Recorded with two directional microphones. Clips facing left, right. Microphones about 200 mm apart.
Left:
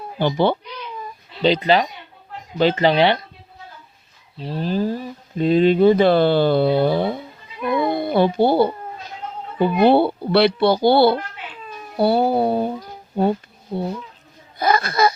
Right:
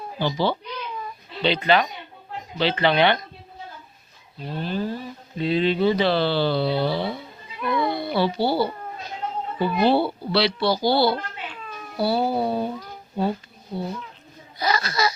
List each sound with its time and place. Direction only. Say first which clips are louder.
0.2 s a child's voice: left 5 dB; 55° left (ahead or behind)
1.6 s speech: left 3 dB; 35° left (ahead or behind)
4.4 s speech: left 5 dB; 35° left (ahead or behind); by 7.2 s 50° left (ahead or behind)
7.8 s a sound: left 5 dB; 50° left (ahead or behind)
9.7 s a child's voice: left 5 dB; 55° left (ahead or behind)